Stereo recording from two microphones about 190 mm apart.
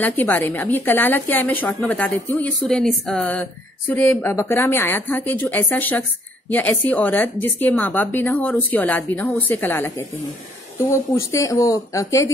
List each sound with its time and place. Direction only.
0.0 s a woman's voice: 10° left (ahead or behind)